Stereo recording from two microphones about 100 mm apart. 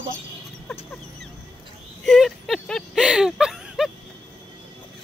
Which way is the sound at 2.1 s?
Centre (ahead or behind).